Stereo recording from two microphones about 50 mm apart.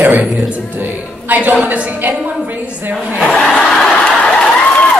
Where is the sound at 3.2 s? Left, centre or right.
Centre.